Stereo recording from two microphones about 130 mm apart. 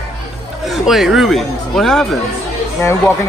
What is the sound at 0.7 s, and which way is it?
Speech, centre (ahead or behind).